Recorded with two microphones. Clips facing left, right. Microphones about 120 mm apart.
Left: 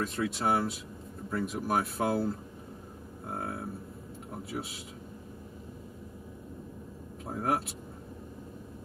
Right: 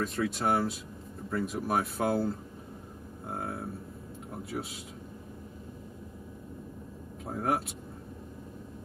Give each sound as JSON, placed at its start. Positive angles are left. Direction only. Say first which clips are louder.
{"t": 0.0, "sound": "speech", "louder": "right 1 dB", "side_deg": 0}
{"t": 7.2, "sound": "speech", "louder": "even", "side_deg": 0}